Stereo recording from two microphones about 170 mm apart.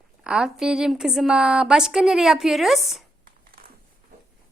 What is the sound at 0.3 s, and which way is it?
A woman's voice, 5° right (ahead or behind).